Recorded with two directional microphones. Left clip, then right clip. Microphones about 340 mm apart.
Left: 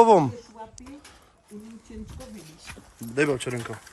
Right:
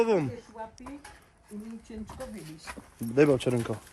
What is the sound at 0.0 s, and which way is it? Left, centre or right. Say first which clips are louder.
Speech: left 9 dB; centre.